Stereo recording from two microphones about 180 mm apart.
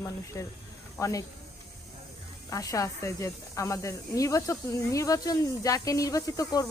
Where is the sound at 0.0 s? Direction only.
15° left (ahead or behind).